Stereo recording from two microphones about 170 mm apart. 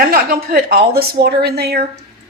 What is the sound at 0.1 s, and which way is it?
A woman's voice, 65° right (ahead or behind).